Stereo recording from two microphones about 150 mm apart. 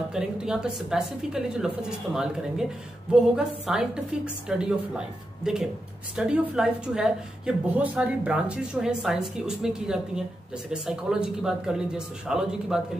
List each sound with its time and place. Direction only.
0.1 s a woman's voice: 5° right (ahead or behind)